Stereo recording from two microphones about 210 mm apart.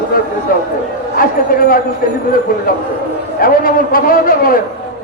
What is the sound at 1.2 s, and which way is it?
Speech, 40° left (ahead or behind).